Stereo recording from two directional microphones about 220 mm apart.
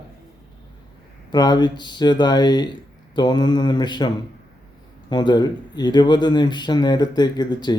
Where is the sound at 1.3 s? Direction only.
20° left (ahead or behind).